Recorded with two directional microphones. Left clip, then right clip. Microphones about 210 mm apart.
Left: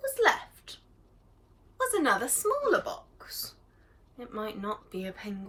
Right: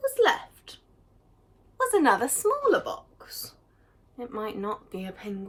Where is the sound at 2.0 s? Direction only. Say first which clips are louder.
Right 5 dB; 25° right (ahead or behind).